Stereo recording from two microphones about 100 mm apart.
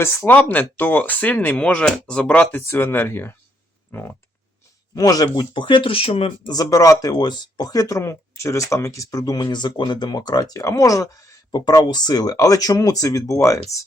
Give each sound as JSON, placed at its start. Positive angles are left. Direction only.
{"t": 0.0, "sound": "speech", "side_deg": 25}
{"t": 4.9, "sound": "speech", "side_deg": 40}
{"t": 6.5, "sound": "speech", "side_deg": 35}